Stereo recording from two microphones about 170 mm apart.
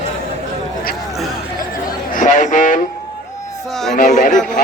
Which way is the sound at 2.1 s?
50° left (ahead or behind).